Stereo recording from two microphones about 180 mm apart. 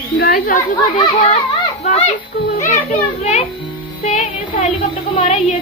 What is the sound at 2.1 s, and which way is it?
Speech, 50° left (ahead or behind).